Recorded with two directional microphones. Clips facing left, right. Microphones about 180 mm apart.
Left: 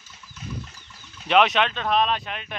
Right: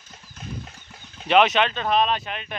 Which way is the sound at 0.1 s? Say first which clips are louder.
Even; 55° right (ahead or behind).